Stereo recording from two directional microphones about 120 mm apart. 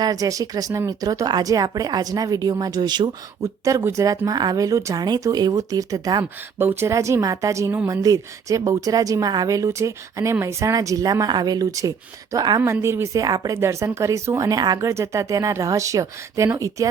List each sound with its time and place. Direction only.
0.0 s speech: 30° right (ahead or behind)
6.6 s speech: 20° right (ahead or behind)